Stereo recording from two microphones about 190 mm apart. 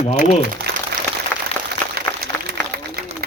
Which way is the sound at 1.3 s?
10° left (ahead or behind).